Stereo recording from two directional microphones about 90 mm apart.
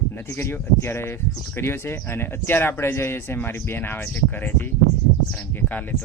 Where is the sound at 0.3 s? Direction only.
30° left (ahead or behind).